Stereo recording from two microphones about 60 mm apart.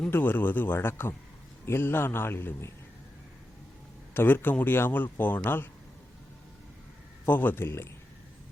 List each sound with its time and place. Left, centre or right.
0.1 s speech: left
4.1 s speech: left
7.3 s speech: left